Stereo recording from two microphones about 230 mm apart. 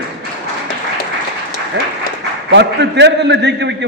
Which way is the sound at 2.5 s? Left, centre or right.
Right.